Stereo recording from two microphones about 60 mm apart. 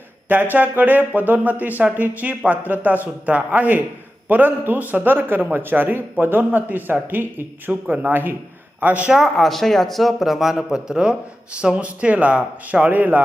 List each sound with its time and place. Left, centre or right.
0.3 s speech: right
9.0 s speech: centre
9.5 s a man's voice: centre; by 13.2 s right